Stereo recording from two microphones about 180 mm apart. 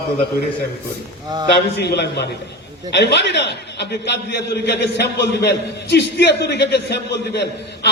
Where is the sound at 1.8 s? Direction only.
70° left (ahead or behind).